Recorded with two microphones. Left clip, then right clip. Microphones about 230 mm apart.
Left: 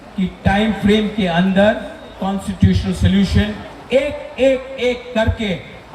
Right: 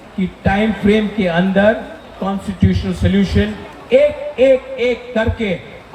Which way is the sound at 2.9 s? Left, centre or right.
Left.